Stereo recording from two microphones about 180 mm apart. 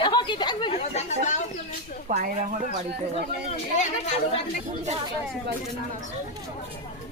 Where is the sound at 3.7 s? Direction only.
40° left (ahead or behind).